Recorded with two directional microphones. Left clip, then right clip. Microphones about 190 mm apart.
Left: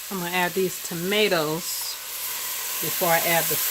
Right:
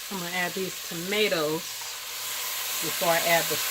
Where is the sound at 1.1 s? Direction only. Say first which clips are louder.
Left 4 dB; 60° left (ahead or behind).